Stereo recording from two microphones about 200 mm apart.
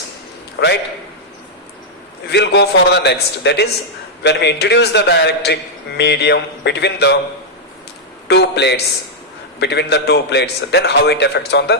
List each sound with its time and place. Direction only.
0.6 s a man's voice: 55° left (ahead or behind)
2.2 s a man's voice: 60° left (ahead or behind)
8.3 s a man's voice: 60° left (ahead or behind)